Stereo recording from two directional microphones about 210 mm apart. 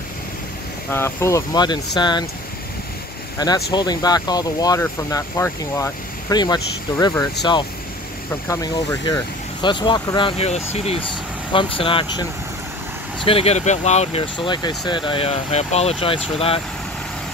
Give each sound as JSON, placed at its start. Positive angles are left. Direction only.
{"t": 0.8, "sound": "speech", "side_deg": 10}
{"t": 3.3, "sound": "speech", "side_deg": 20}
{"t": 9.0, "sound": "speech", "side_deg": 20}